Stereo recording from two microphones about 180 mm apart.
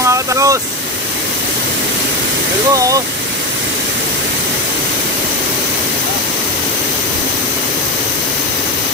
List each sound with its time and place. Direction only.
0.0 s vehicle: 15° right (ahead or behind)
2.7 s speech: 20° right (ahead or behind)